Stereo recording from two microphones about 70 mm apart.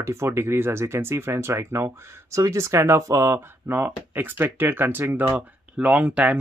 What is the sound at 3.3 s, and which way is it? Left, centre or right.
Speech, right.